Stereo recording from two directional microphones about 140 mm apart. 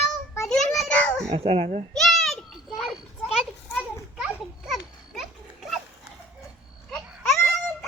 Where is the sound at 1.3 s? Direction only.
45° right (ahead or behind).